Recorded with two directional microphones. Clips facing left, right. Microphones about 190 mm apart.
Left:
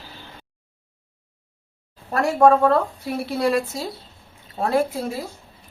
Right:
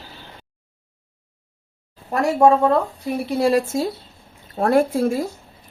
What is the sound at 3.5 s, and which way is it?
Speech, 40° right (ahead or behind).